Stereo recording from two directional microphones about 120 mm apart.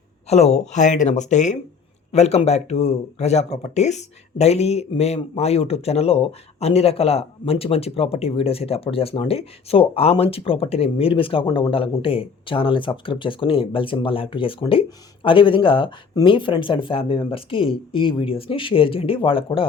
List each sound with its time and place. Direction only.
0.3 s speech: 65° left (ahead or behind); by 1.5 s 80° left
2.1 s speech: 65° left (ahead or behind); by 19.6 s 50° left (ahead or behind)